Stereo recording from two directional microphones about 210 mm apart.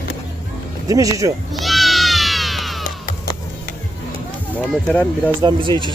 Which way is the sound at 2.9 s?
40° left (ahead or behind).